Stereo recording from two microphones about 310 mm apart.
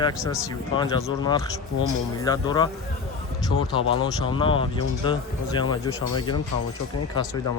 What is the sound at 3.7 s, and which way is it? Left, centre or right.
Speech, centre.